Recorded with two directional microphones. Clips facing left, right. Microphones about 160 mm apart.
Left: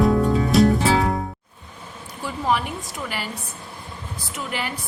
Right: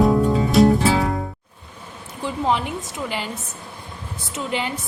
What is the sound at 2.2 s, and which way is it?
A woman's voice, 20° right (ahead or behind).